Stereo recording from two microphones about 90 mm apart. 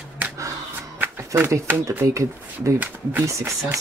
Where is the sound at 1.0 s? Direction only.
25° right (ahead or behind).